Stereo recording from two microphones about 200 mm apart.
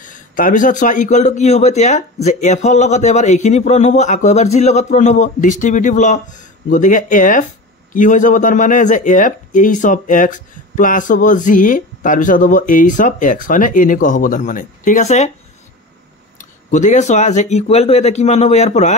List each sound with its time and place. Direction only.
0.0 s speech: 40° left (ahead or behind)
16.3 s speech: 40° left (ahead or behind)